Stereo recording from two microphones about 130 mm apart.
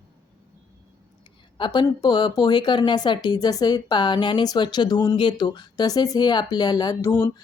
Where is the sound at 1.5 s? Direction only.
40° left (ahead or behind).